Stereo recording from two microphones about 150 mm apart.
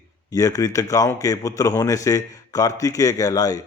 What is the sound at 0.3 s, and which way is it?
Speech, 25° left (ahead or behind).